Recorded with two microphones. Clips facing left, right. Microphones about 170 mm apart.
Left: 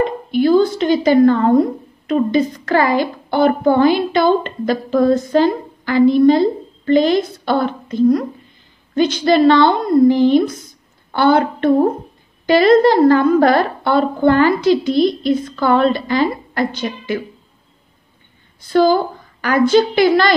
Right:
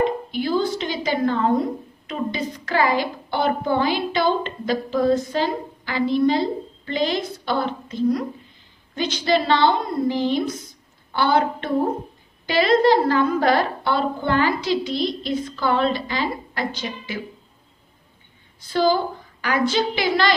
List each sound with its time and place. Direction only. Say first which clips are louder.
0.3 s a sound: left 9 dB; 50° left (ahead or behind)
2.0 s a woman's voice: left 11 dB; 50° left (ahead or behind)
18.7 s a woman's voice: left 6 dB; 50° left (ahead or behind)